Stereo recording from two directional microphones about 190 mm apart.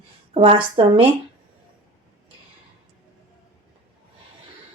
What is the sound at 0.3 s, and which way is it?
Speech, 30° right (ahead or behind).